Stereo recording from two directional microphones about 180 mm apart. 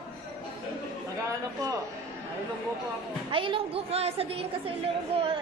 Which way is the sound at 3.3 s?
30° right (ahead or behind).